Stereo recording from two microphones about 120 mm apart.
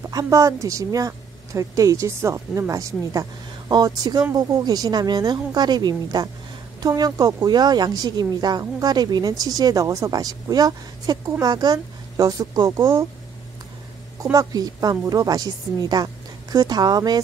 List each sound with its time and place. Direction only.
0.0 s a woman's voice: 30° right (ahead or behind)
14.2 s speech: 30° right (ahead or behind)